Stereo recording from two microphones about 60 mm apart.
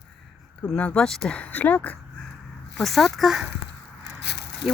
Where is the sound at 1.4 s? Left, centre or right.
Left.